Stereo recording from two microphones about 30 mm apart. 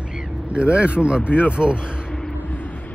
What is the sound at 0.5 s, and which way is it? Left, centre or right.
Speech, right.